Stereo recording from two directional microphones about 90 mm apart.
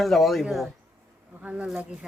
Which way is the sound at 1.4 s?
15° right (ahead or behind).